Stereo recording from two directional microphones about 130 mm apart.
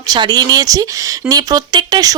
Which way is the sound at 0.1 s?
30° right (ahead or behind).